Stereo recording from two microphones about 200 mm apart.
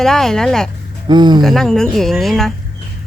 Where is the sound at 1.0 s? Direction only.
20° right (ahead or behind).